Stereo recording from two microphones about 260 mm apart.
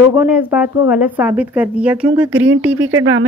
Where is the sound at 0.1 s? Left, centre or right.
Centre.